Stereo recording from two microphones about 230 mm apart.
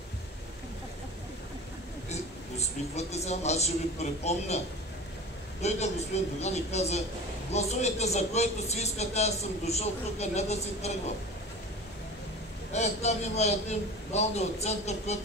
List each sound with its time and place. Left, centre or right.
3.0 s speech: left
5.6 s speech: left
12.7 s speech: left